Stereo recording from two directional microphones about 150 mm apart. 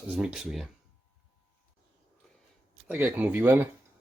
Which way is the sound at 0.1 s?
5° right (ahead or behind).